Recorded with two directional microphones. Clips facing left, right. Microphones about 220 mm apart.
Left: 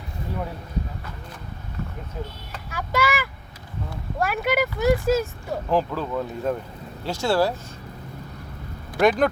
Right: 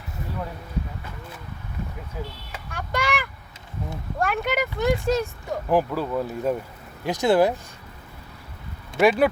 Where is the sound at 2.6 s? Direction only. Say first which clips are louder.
Left 3 dB; 5° left (ahead or behind).